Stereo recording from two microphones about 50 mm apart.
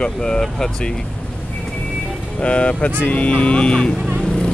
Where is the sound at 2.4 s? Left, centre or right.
Left.